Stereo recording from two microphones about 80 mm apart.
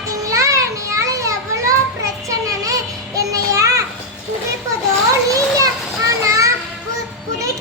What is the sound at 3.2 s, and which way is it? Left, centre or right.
Child singing, right.